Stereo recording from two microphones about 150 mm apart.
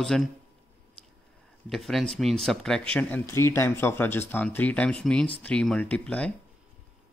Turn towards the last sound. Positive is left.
turn(degrees=10)  # may be behind; listen again after turning